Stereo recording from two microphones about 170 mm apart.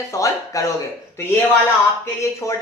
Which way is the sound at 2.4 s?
20° left (ahead or behind).